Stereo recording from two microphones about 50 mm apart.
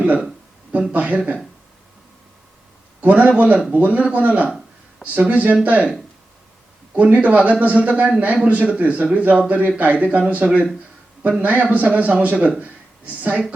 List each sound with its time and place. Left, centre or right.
0.0 s speech: right
3.0 s speech: right
6.9 s speech: right
12.5 s a sound: right